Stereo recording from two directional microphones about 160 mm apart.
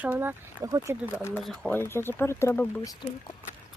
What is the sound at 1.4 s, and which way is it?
Speech, centre (ahead or behind).